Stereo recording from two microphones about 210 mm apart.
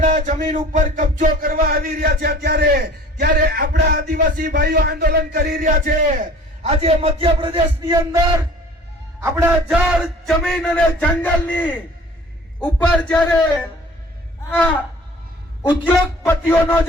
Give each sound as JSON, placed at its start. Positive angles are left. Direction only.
{"t": 0.0, "sound": "a sound", "side_deg": -35}
{"t": 6.6, "sound": "a man's voice", "side_deg": -30}
{"t": 9.6, "sound": "speech", "side_deg": 0}
{"t": 15.9, "sound": "speech", "side_deg": 10}